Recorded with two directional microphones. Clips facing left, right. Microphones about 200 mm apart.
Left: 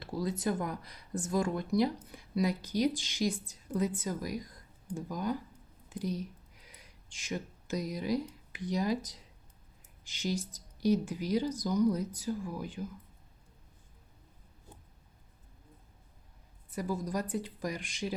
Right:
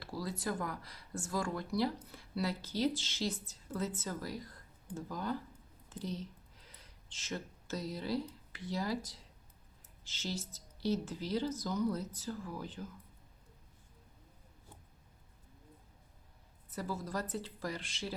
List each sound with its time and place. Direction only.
0.0 s speech: 20° left (ahead or behind)
5.9 s a sound: 10° left (ahead or behind)
8.5 s speech: 15° left (ahead or behind)
16.6 s speech: 15° left (ahead or behind)